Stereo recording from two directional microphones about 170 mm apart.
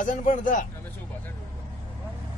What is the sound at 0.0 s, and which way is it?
Speech, 50° left (ahead or behind).